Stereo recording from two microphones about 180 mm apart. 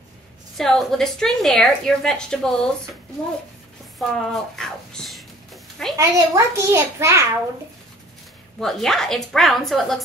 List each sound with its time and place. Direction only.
0.6 s a woman's voice: centre (ahead or behind)
4.0 s a sound: 5° left (ahead or behind)
5.9 s a child's voice: 15° right (ahead or behind)
8.5 s a woman's voice: centre (ahead or behind)